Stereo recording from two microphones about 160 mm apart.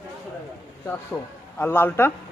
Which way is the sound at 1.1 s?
10° left (ahead or behind).